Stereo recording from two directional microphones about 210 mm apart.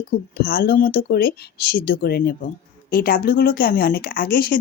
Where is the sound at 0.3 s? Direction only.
45° left (ahead or behind).